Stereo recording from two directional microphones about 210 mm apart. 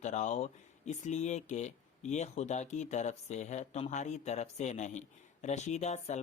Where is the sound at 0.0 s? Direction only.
35° left (ahead or behind).